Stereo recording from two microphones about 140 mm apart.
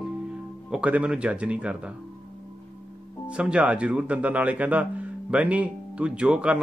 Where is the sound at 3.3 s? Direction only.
10° right (ahead or behind).